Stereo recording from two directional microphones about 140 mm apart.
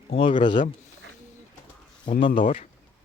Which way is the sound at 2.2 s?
35° left (ahead or behind).